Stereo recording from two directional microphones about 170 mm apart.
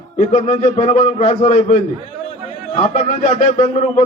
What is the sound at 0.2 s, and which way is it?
Speech, 45° left (ahead or behind).